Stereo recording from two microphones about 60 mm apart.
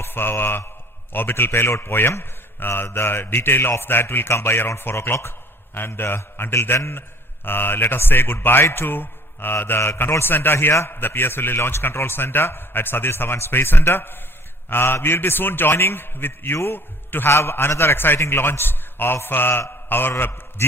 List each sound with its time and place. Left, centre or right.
0.0 s mantra: left
1.1 s a man's voice: left